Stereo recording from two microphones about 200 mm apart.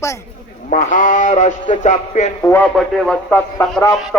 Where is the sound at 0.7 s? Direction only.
40° left (ahead or behind).